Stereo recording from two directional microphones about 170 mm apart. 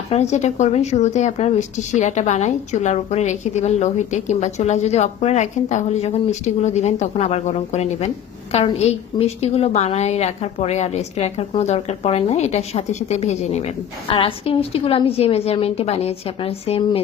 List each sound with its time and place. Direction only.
0.1 s a woman's voice: 40° left (ahead or behind)